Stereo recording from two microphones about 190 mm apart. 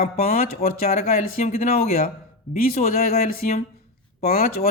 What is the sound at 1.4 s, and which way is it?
Speech, 35° left (ahead or behind).